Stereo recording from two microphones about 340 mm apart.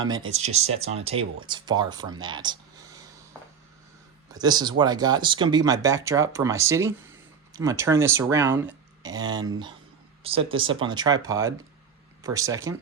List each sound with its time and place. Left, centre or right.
0.0 s speech: centre
4.3 s speech: centre